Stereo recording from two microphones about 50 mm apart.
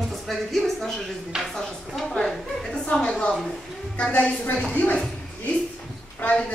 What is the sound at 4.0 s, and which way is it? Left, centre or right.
A woman's voice, left.